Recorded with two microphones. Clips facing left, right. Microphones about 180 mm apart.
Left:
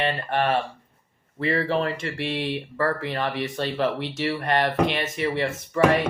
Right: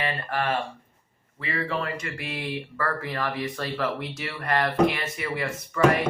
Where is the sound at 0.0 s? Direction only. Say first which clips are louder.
Left 4 dB; 25° left (ahead or behind).